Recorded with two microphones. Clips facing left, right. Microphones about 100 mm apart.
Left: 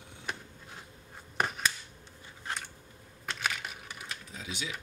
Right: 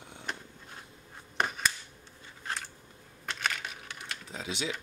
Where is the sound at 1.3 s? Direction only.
5° left (ahead or behind).